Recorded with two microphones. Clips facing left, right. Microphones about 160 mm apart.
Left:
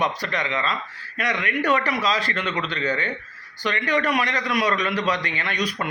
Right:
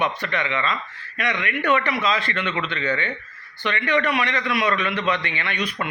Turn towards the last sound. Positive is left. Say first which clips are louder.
# left 1 dB
turn(degrees=40)  # may be behind; listen again after turning